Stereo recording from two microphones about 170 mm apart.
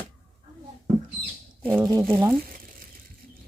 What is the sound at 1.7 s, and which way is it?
Speech, 20° right (ahead or behind).